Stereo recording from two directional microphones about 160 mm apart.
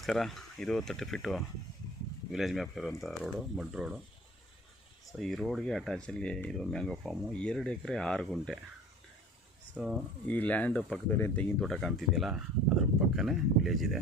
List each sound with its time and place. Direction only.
0.0 s speech: centre (ahead or behind)
5.2 s speech: centre (ahead or behind)
9.7 s speech: 5° right (ahead or behind)
10.2 s speech: 10° left (ahead or behind)
11.6 s speech: centre (ahead or behind)